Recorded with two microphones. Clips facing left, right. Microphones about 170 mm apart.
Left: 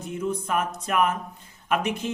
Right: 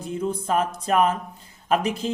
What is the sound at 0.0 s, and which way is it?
Speech, 30° right (ahead or behind).